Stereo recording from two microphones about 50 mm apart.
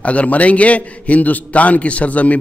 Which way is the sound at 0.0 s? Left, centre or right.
Left.